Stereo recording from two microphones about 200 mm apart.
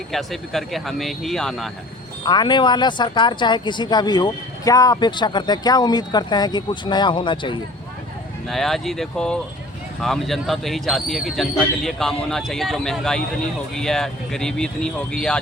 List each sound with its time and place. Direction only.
0.1 s speech: centre (ahead or behind)
2.2 s speech: 20° left (ahead or behind)
8.4 s speech: centre (ahead or behind)